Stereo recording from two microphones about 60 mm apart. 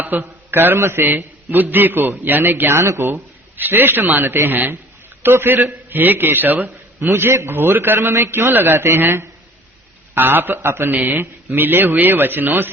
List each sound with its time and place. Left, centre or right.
0.1 s a man's voice: right
2.8 s a man's voice: right
3.6 s a man's voice: right
7.0 s a man's voice: right
7.9 s a man's voice: right
10.9 s a man's voice: right